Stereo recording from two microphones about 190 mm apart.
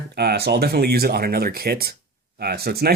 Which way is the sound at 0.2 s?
55° right (ahead or behind).